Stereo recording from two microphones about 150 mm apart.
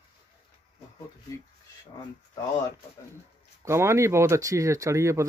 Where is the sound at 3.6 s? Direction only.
20° right (ahead or behind).